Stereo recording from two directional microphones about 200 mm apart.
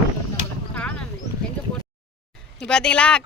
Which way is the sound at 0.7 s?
5° left (ahead or behind).